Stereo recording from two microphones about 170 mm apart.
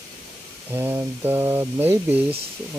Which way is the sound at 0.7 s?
15° right (ahead or behind).